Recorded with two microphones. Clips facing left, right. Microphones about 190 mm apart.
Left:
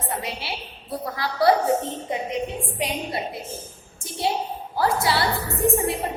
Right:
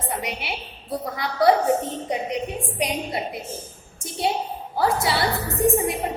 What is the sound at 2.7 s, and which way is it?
Speech, 20° right (ahead or behind).